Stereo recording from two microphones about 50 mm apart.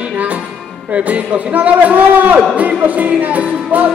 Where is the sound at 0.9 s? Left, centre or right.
Right.